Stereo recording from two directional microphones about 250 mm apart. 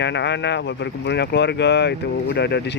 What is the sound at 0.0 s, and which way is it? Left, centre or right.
Speech, left.